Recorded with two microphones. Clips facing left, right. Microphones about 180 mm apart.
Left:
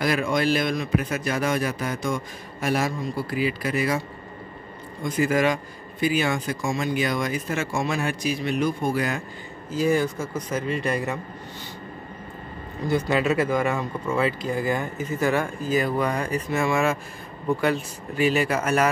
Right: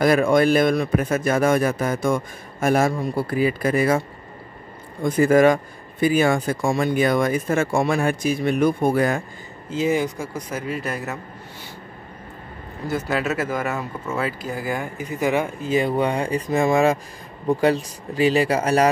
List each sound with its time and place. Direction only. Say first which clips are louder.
0.0 s speech: right 7 dB; 50° right (ahead or behind)
5.0 s speech: right 7 dB; 50° right (ahead or behind)
9.7 s speech: right 1 dB; 20° right (ahead or behind); by 11.1 s 5° right (ahead or behind)
13.1 s speech: left 1 dB; 5° right (ahead or behind); by 18.9 s 35° right (ahead or behind)